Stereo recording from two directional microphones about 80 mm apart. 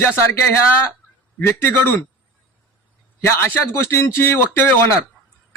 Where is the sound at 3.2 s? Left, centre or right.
Left.